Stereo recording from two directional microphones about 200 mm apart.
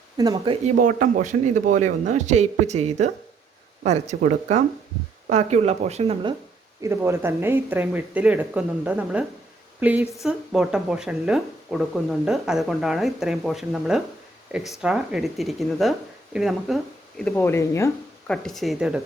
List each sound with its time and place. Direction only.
0.2 s speech: 25° right (ahead or behind)
0.8 s a man's voice: 40° right (ahead or behind)
6.8 s speech: 15° right (ahead or behind); by 17.9 s 15° left (ahead or behind)
18.3 s speech: centre (ahead or behind)